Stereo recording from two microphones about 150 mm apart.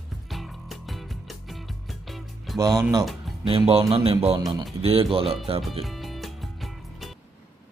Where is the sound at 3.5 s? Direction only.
40° right (ahead or behind).